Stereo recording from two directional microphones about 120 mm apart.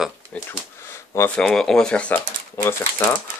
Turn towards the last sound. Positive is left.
turn(degrees=25)  # may be behind; listen again after turning